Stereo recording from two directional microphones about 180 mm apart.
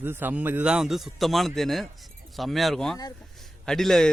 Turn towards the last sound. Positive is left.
turn(degrees=0)  # may be behind; listen again after turning